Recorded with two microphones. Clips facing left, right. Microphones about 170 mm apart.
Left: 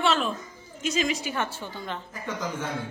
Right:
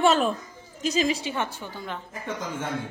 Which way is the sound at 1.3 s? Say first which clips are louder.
Right 1 dB; 15° right (ahead or behind).